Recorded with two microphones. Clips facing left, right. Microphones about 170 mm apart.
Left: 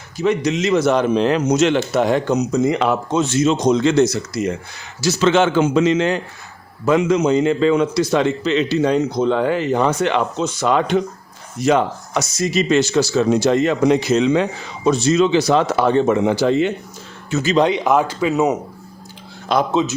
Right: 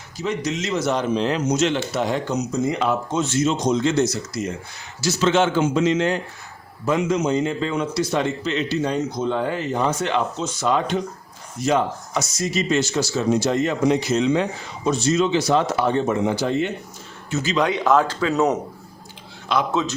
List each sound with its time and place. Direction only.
0.2 s a man's voice: 65° left (ahead or behind); by 16.7 s 90° left
17.6 s speech: 20° left (ahead or behind)
19.5 s speech: 40° left (ahead or behind)